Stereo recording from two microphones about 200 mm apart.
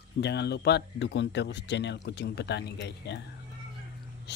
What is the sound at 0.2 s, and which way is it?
Speech, 55° left (ahead or behind).